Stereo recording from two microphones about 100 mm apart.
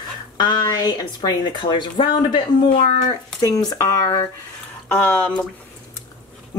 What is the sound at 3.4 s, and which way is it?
Speech, 35° left (ahead or behind).